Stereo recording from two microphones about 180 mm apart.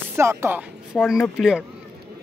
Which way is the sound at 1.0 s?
Centre (ahead or behind).